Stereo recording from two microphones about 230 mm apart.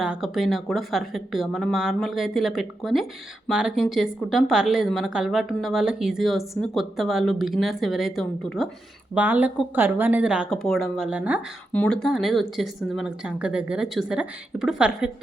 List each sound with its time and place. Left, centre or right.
0.0 s speech: centre